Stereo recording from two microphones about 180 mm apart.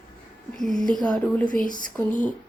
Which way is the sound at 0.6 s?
5° left (ahead or behind).